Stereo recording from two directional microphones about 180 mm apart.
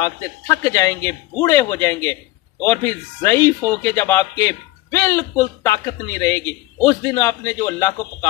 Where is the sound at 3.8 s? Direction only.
15° left (ahead or behind).